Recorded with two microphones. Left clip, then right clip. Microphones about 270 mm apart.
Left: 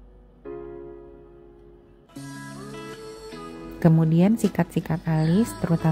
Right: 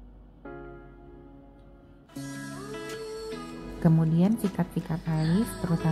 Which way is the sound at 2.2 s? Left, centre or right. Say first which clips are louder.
Even; centre.